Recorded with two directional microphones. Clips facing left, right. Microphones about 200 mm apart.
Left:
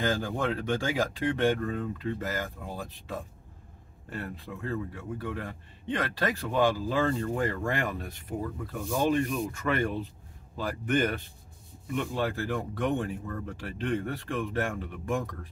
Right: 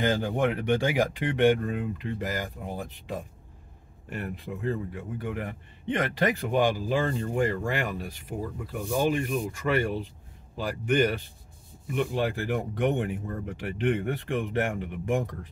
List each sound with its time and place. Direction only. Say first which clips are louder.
0.0 s a man's voice: right 4 dB; 20° right (ahead or behind)
9.7 s a man's voice: right 3 dB; 10° right (ahead or behind)